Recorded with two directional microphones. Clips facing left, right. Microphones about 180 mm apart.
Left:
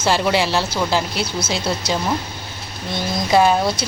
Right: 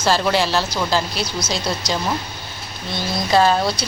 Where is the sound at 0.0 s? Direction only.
20° left (ahead or behind).